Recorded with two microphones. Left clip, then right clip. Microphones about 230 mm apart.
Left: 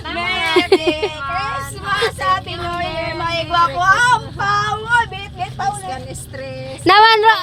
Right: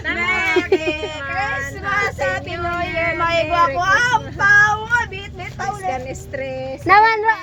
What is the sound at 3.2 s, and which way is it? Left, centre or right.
Speech, centre.